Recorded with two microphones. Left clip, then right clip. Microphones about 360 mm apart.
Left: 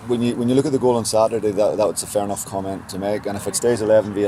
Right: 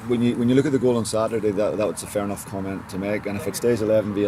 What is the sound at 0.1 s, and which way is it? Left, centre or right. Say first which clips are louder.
Speech: left 1 dB; centre.